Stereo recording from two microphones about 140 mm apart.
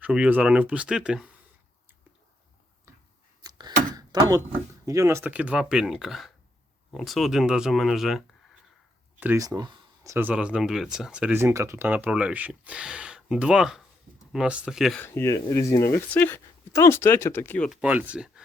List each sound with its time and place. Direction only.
0.0 s speech: 10° right (ahead or behind)
3.4 s a sound: 25° right (ahead or behind)
4.9 s speech: 20° right (ahead or behind); by 8.2 s centre (ahead or behind)
9.4 s a sound: 25° right (ahead or behind)
10.1 s speech: 15° right (ahead or behind)
14.9 s speech: 15° left (ahead or behind)
17.7 s speech: 10° right (ahead or behind)